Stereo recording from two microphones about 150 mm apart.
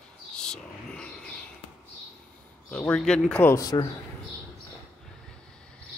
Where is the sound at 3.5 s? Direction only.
25° left (ahead or behind).